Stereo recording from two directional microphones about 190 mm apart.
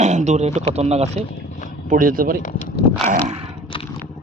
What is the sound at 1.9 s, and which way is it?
Speech, 45° right (ahead or behind).